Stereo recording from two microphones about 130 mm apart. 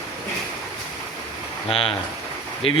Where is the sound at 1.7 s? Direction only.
45° left (ahead or behind).